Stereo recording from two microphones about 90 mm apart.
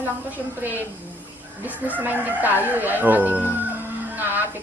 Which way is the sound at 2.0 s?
20° right (ahead or behind).